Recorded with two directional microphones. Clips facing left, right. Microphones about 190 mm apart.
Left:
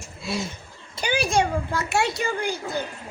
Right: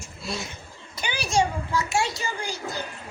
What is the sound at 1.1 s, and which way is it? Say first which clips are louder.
A child's voice: left 2 dB; 55° left (ahead or behind).